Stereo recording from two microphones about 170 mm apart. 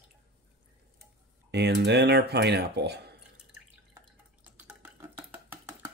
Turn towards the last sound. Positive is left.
turn(degrees=-10)  # may be behind; listen again after turning